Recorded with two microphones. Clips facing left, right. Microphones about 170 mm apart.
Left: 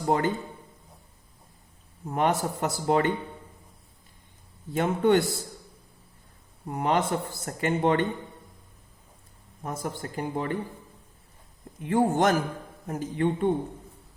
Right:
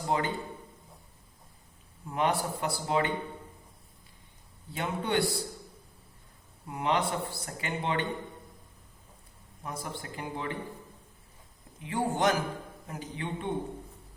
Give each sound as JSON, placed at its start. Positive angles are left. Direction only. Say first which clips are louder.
{"t": 0.1, "sound": "speech", "louder": "left 5 dB", "side_deg": 45}
{"t": 2.0, "sound": "speech", "louder": "left 4 dB", "side_deg": 45}
{"t": 4.7, "sound": "speech", "louder": "left 8 dB", "side_deg": 50}
{"t": 6.7, "sound": "speech", "louder": "left 4 dB", "side_deg": 45}
{"t": 9.6, "sound": "speech", "louder": "left 5 dB", "side_deg": 45}
{"t": 11.8, "sound": "speech", "louder": "left 6 dB", "side_deg": 50}